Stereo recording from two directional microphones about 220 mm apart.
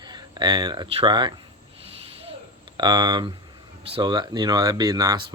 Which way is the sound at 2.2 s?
25° right (ahead or behind).